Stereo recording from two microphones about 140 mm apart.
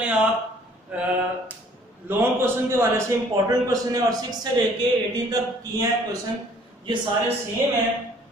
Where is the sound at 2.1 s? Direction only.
15° right (ahead or behind).